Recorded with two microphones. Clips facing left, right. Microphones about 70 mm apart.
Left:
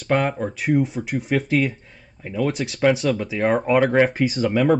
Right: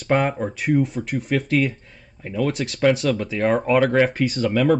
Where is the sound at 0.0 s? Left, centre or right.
Centre.